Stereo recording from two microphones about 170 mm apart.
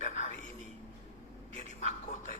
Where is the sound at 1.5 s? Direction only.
40° right (ahead or behind).